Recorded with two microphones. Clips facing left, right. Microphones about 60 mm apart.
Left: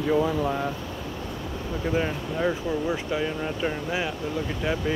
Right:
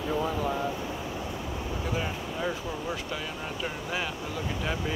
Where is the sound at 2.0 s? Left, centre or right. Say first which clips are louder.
Left 6 dB; left.